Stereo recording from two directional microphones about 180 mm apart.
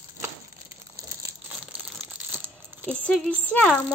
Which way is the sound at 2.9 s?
5° left (ahead or behind).